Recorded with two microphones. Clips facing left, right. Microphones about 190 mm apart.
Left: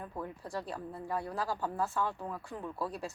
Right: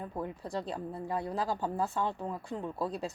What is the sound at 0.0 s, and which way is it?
A woman's voice, 20° right (ahead or behind).